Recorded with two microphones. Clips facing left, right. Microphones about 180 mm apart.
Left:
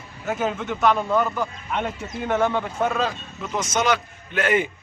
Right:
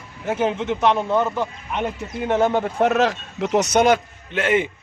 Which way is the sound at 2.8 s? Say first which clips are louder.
Right 6 dB; 75° right (ahead or behind).